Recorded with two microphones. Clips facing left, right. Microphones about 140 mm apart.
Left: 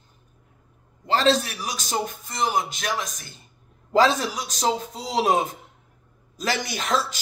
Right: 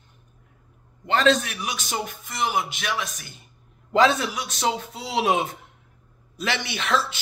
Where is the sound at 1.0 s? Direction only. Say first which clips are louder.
Even; 35° left (ahead or behind).